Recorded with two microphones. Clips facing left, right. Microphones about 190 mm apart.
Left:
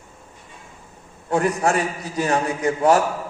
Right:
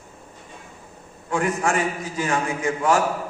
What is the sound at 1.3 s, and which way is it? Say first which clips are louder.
A man's voice: left 3 dB; 35° left (ahead or behind).